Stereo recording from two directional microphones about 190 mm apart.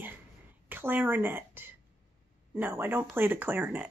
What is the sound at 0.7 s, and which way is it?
Speech, 10° right (ahead or behind).